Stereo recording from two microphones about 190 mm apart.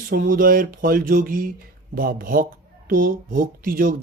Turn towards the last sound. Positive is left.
turn(degrees=-50)  # may be behind; listen again after turning